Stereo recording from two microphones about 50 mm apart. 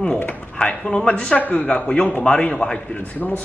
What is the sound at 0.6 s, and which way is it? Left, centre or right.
Speech, centre.